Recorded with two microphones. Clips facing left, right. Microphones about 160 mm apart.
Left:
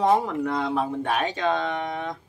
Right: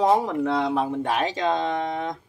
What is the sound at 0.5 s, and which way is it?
Speech, 15° right (ahead or behind).